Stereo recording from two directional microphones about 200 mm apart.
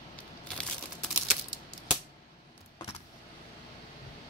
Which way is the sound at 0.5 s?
5° left (ahead or behind).